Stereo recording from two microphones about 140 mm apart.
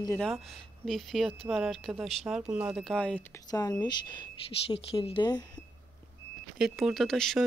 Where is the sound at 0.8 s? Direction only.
Centre (ahead or behind).